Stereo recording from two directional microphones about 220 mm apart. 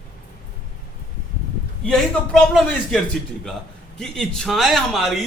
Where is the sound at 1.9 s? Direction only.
5° left (ahead or behind).